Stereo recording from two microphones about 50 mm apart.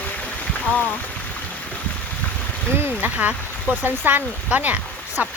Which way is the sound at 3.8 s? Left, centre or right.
Right.